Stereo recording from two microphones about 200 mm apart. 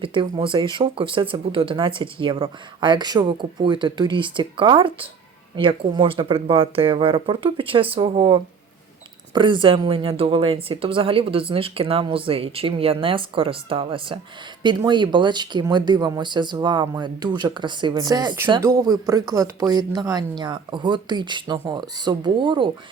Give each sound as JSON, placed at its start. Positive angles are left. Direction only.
{"t": 0.0, "sound": "speech", "side_deg": -25}